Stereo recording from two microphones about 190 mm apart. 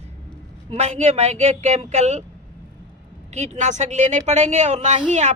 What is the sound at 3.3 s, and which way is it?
A woman's voice, 35° right (ahead or behind).